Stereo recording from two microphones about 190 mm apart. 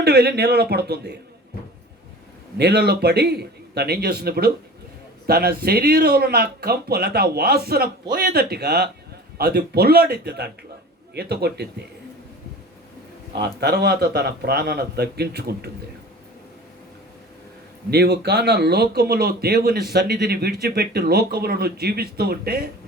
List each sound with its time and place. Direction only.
0.0 s speech: 55° right (ahead or behind)
2.6 s speech: 55° right (ahead or behind)
13.4 s speech: 60° right (ahead or behind)
17.9 s speech: 60° right (ahead or behind)